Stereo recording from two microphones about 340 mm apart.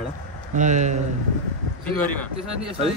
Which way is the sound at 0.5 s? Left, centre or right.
Right.